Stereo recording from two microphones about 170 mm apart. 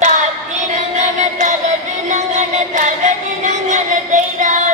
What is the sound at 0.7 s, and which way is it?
Music, 45° right (ahead or behind).